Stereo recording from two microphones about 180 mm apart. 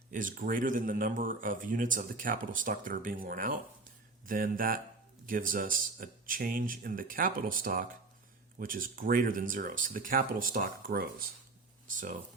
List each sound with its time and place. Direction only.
0.1 s speech: 45° right (ahead or behind)